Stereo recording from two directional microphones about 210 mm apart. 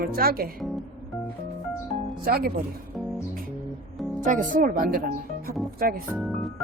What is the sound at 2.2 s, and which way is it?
Speech, 45° right (ahead or behind).